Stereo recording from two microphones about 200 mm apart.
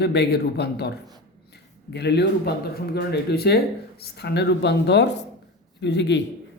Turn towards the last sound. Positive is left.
turn(degrees=60)  # may be behind; listen again after turning